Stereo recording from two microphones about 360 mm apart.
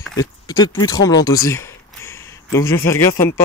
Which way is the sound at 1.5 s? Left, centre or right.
Centre.